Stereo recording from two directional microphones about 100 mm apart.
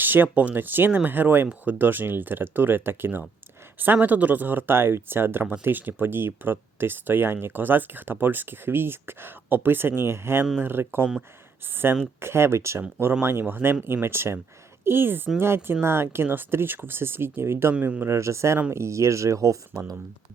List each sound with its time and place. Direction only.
0.0 s speech: 20° right (ahead or behind)